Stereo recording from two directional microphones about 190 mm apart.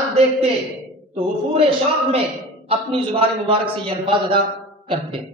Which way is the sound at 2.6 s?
30° right (ahead or behind).